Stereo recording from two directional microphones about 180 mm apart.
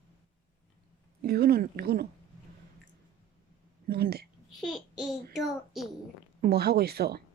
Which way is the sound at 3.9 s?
60° right (ahead or behind).